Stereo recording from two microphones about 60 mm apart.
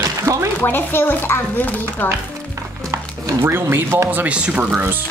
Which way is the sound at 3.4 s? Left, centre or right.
Right.